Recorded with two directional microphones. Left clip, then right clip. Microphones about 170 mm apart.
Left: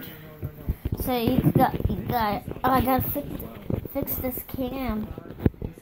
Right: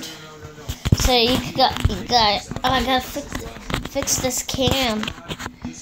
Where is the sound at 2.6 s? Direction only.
30° left (ahead or behind).